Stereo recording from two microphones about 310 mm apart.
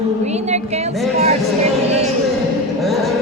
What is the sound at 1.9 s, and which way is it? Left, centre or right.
Music, centre.